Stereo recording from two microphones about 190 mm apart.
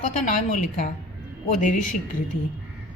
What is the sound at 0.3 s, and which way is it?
A woman's voice, 45° left (ahead or behind).